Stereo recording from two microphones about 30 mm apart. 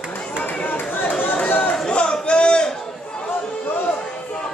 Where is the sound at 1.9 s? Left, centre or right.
Left.